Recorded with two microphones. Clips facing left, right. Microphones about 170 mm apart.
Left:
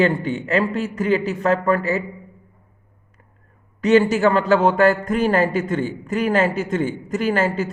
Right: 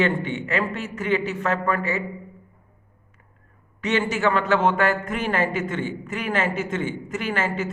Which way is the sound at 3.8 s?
40° left (ahead or behind).